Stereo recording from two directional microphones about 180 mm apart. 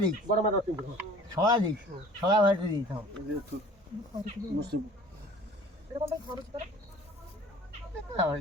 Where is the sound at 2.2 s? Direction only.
25° right (ahead or behind).